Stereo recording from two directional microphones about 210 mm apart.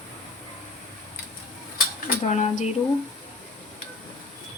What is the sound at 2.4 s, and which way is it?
Speech, 35° left (ahead or behind).